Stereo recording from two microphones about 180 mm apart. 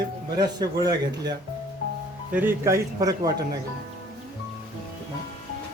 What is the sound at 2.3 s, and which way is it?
A man's voice, 10° right (ahead or behind).